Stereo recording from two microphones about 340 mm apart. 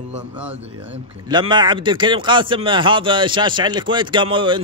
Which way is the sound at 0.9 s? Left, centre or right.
Centre.